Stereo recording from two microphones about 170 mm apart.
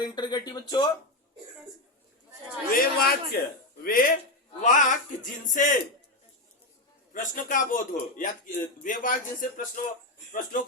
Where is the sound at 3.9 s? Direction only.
55° left (ahead or behind).